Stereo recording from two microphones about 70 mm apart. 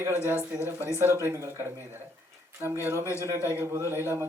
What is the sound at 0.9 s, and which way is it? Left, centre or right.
Speech, right.